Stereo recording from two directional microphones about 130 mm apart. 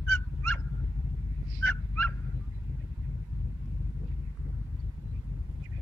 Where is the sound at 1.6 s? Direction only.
10° left (ahead or behind).